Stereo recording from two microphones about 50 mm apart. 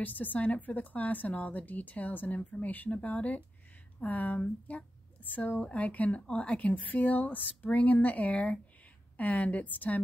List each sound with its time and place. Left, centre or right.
0.0 s speech: left